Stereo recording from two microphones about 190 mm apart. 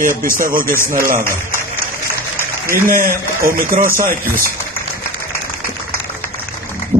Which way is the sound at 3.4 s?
50° right (ahead or behind).